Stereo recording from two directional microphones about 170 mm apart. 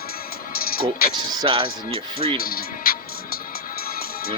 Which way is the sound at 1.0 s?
60° left (ahead or behind).